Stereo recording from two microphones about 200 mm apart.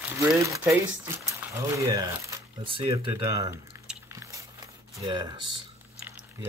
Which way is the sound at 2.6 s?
25° right (ahead or behind).